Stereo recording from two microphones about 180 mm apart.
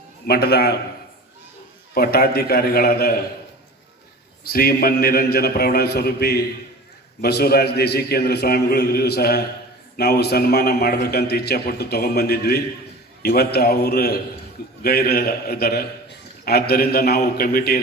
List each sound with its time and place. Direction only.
0.3 s a man's voice: 60° left (ahead or behind)
2.0 s a man's voice: 55° left (ahead or behind)
4.4 s a man's voice: 55° left (ahead or behind)